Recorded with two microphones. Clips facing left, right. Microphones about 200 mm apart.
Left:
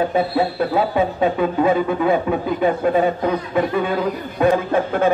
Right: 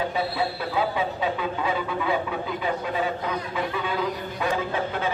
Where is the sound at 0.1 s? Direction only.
50° left (ahead or behind).